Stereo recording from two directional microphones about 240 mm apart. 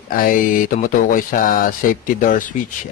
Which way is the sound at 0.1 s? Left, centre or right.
Left.